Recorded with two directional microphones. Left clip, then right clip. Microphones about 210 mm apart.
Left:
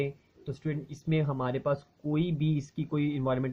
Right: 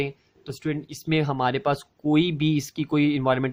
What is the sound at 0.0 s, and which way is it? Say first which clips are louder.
Speech: right 4 dB; 45° right (ahead or behind).